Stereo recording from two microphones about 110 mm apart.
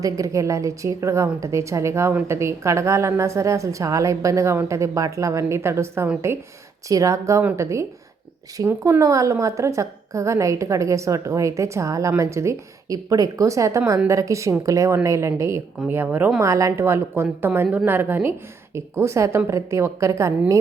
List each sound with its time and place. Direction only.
0.0 s a woman's voice: 30° right (ahead or behind)